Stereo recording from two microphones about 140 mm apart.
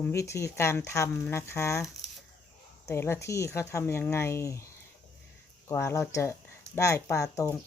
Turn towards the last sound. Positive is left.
turn(degrees=25)  # may be behind; listen again after turning